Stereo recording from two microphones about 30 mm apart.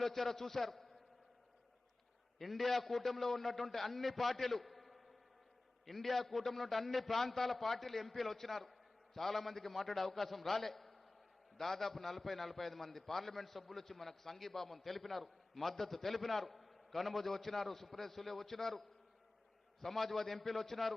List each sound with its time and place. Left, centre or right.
0.0 s a man's voice: centre
2.4 s a man's voice: centre